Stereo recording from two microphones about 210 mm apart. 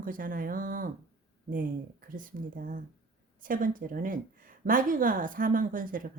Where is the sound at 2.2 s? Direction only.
40° right (ahead or behind).